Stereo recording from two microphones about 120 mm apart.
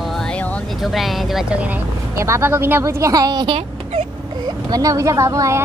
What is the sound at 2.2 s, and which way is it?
Speech, 20° right (ahead or behind).